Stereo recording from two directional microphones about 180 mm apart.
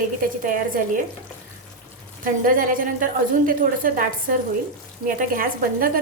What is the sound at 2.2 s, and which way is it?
A woman's voice, 50° right (ahead or behind).